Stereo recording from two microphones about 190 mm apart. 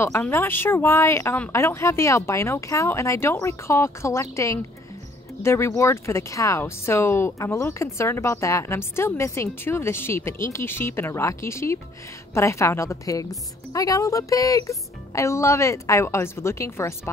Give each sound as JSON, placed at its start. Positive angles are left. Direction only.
{"t": 0.0, "sound": "speech", "side_deg": 10}